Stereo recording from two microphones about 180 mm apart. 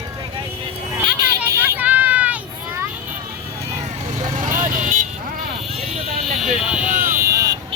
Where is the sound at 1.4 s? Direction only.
10° right (ahead or behind).